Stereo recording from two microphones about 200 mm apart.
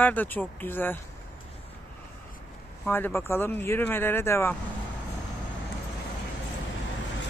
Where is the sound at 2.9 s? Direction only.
5° left (ahead or behind).